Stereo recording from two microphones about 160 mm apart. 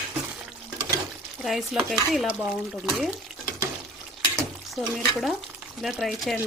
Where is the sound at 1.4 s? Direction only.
Centre (ahead or behind).